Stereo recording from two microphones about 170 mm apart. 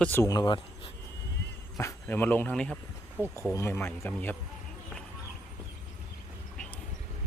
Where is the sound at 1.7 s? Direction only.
15° left (ahead or behind).